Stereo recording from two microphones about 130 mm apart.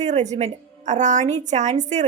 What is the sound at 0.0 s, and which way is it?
A woman's voice, 65° right (ahead or behind).